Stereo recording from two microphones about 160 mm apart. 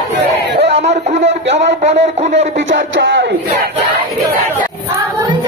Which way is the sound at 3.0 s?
90° right.